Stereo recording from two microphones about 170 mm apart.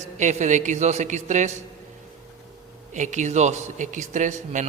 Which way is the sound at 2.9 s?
45° right (ahead or behind).